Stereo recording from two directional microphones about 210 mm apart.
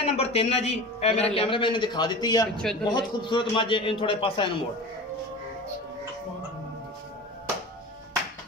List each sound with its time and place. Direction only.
0.0 s a man's voice: 30° left (ahead or behind)
2.5 s a man's voice: 5° left (ahead or behind)
2.8 s a man's voice: 20° left (ahead or behind)